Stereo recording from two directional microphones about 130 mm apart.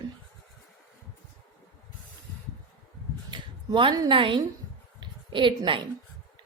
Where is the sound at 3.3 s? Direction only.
40° right (ahead or behind).